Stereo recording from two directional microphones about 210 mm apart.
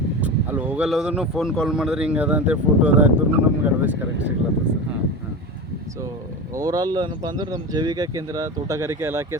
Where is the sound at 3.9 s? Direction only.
60° right (ahead or behind).